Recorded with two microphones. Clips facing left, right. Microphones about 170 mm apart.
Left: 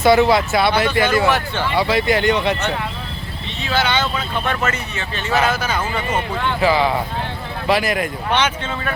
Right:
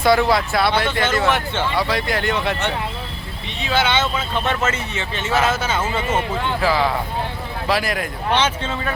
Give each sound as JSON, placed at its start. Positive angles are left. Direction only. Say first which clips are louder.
{"t": 0.0, "sound": "speech", "louder": "left 3 dB", "side_deg": 0}
{"t": 3.8, "sound": "speech", "louder": "even", "side_deg": -20}
{"t": 5.3, "sound": "speech", "louder": "left 1 dB", "side_deg": 0}
{"t": 5.5, "sound": "speech", "louder": "even", "side_deg": -25}
{"t": 6.6, "sound": "speech", "louder": "left 3 dB", "side_deg": 0}
{"t": 8.3, "sound": "speech", "louder": "right 2 dB", "side_deg": -30}